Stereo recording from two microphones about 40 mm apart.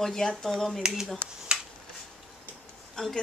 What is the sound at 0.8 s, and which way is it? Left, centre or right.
Speech, centre.